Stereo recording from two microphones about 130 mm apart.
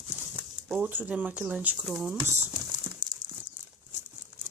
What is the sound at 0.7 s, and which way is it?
Speech, 10° right (ahead or behind).